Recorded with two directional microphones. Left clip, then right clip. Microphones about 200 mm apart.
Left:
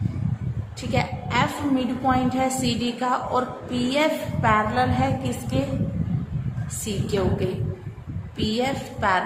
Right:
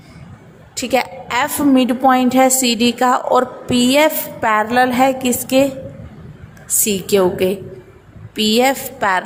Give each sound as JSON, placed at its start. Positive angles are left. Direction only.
{"t": 0.8, "sound": "a woman's voice", "side_deg": -45}
{"t": 6.8, "sound": "a woman's voice", "side_deg": -45}